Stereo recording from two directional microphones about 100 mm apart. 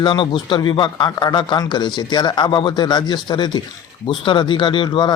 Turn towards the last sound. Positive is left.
turn(degrees=50)  # may be behind; listen again after turning